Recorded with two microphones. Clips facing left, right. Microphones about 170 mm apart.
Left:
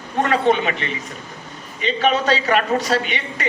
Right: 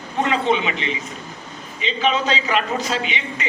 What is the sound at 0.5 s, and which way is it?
A man's voice, 50° left (ahead or behind).